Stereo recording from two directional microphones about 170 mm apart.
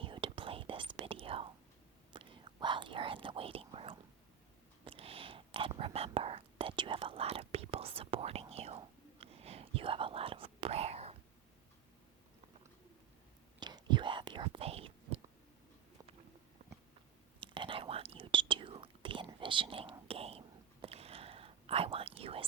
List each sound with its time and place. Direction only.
0.0 s whispering: 30° right (ahead or behind)
13.6 s whispering: 25° right (ahead or behind)
16.6 s biting: 40° right (ahead or behind)
17.4 s whispering: 30° right (ahead or behind)